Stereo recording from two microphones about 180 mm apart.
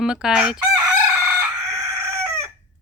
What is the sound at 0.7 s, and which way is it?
Chicken, 20° right (ahead or behind).